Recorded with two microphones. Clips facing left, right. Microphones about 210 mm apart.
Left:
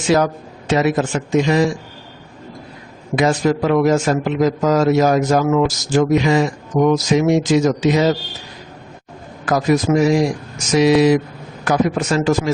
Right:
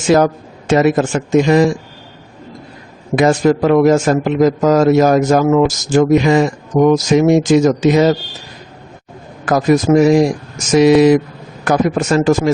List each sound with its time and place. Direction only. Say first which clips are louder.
0.1 s a man's voice: right 4 dB; 50° right (ahead or behind)
3.2 s a man's voice: right 4 dB; 45° right (ahead or behind)
9.5 s a man's voice: right 4 dB; 50° right (ahead or behind)